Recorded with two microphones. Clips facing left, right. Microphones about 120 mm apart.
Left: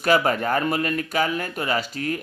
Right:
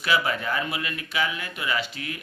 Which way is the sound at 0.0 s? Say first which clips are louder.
Left 5 dB; 45° left (ahead or behind).